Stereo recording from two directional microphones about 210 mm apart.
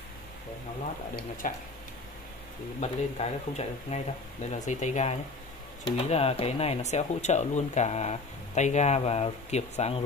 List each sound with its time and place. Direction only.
1.1 s speech: 40° left (ahead or behind)
2.8 s speech: 30° left (ahead or behind)